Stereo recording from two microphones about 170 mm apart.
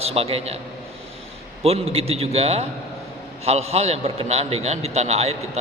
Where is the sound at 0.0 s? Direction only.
35° right (ahead or behind).